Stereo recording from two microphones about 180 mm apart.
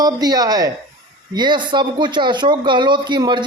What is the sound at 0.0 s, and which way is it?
Speech, 20° right (ahead or behind).